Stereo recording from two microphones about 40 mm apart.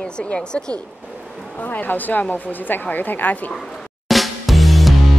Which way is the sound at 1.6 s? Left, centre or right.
Left.